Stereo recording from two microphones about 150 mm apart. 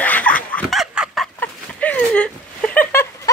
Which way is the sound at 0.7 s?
5° right (ahead or behind).